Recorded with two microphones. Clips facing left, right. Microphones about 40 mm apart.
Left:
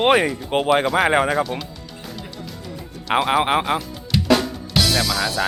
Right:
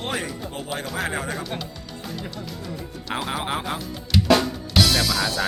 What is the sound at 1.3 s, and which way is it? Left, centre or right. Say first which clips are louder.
Speech: left 10 dB; centre.